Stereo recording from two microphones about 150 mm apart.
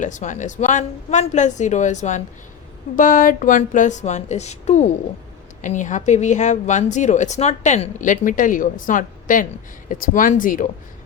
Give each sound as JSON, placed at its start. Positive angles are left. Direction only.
{"t": 0.0, "sound": "a woman's voice", "side_deg": 55}
{"t": 2.9, "sound": "a woman's voice", "side_deg": 60}